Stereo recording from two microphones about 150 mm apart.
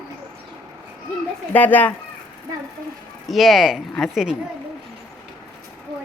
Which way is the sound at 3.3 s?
Centre (ahead or behind).